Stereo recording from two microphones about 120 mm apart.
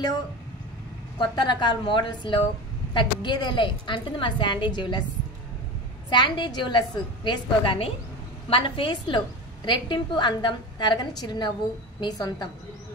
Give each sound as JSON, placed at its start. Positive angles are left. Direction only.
{"t": 1.1, "sound": "a woman's voice", "side_deg": 40}
{"t": 6.0, "sound": "a woman's voice", "side_deg": 40}